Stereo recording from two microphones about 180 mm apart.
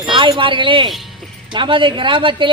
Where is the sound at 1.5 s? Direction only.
30° right (ahead or behind).